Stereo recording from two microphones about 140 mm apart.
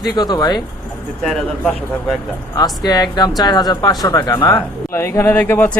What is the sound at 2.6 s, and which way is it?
A man's voice, 30° left (ahead or behind).